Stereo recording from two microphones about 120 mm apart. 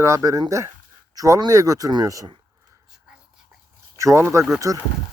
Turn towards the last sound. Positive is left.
turn(degrees=-25)  # may be behind; listen again after turning